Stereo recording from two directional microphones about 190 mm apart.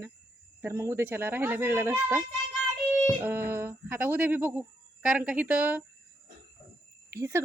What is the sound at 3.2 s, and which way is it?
Speech, 15° right (ahead or behind).